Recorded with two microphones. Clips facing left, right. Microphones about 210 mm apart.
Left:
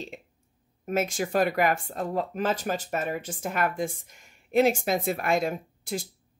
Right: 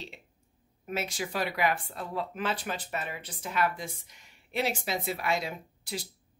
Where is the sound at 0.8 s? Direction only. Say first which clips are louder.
Left 7 dB; 45° left (ahead or behind).